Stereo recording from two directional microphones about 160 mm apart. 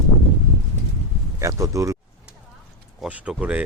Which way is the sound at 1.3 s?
20° right (ahead or behind).